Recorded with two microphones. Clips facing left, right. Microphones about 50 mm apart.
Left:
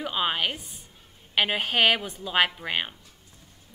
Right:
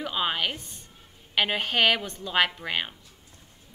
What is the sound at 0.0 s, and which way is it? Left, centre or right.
A woman's voice, centre.